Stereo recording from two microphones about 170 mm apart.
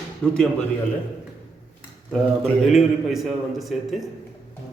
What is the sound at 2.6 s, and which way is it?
A man's voice, centre (ahead or behind).